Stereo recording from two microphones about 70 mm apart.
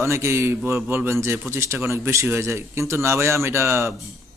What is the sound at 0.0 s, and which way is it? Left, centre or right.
A man's voice, right.